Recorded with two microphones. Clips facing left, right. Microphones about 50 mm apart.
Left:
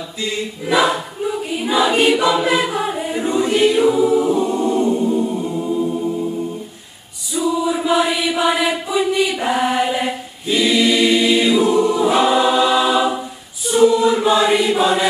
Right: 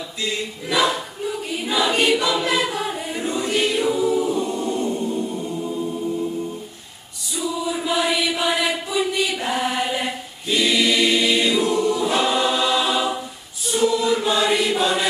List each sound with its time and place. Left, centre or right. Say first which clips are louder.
0.2 s choir: left 3 dB; centre
7.3 s chant: left 6 dB; centre
13.7 s choir: left 6 dB; centre